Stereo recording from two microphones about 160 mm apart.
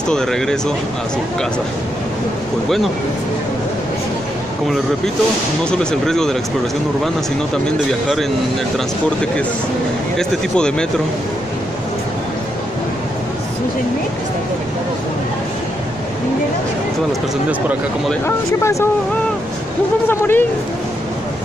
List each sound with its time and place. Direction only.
0.1 s speech: 5° left (ahead or behind)
5.7 s speech: 5° left (ahead or behind)
10.1 s speech: 5° left (ahead or behind)
17.5 s speech: 10° right (ahead or behind)
18.2 s speech: 20° left (ahead or behind)
20.1 s speech: 15° left (ahead or behind)